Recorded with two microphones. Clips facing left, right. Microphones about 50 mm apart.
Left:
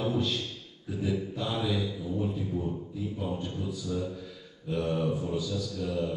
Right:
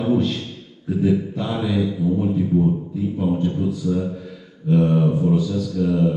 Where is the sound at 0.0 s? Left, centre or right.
Right.